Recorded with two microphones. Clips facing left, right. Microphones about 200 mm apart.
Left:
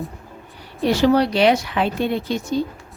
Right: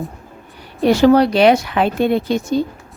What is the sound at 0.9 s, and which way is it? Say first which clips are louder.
A woman's voice: right 5 dB; 50° right (ahead or behind).